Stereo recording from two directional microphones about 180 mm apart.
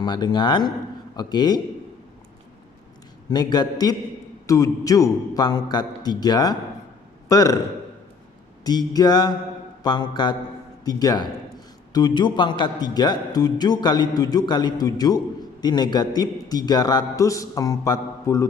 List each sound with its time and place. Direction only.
0.0 s a man's voice: 25° left (ahead or behind)
3.2 s a man's voice: 20° left (ahead or behind)
8.6 s a man's voice: 20° left (ahead or behind)